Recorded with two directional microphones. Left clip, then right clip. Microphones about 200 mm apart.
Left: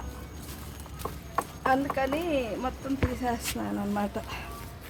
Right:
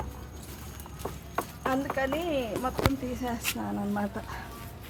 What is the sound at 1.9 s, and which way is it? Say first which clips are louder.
Speech: left 1 dB; 5° left (ahead or behind).